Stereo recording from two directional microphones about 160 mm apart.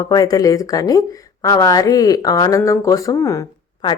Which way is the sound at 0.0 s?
25° left (ahead or behind).